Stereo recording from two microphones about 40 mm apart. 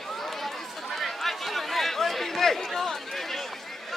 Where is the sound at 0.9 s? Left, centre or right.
Centre.